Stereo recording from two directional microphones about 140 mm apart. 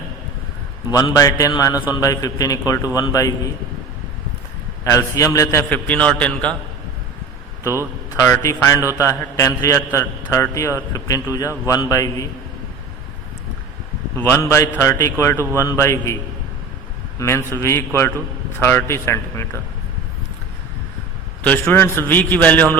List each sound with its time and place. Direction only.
0.9 s a man's voice: 25° left (ahead or behind)
4.9 s a man's voice: 20° left (ahead or behind)
5.6 s a man's voice: 10° left (ahead or behind)
8.3 s a man's voice: 20° left (ahead or behind)
14.2 s a man's voice: 15° left (ahead or behind)
17.2 s a man's voice: 20° left (ahead or behind)
21.4 s a man's voice: 10° left (ahead or behind)